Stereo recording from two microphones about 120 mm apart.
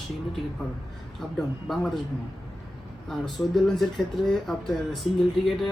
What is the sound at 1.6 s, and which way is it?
Speech, centre (ahead or behind).